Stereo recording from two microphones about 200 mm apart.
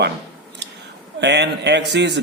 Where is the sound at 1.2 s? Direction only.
60° right (ahead or behind).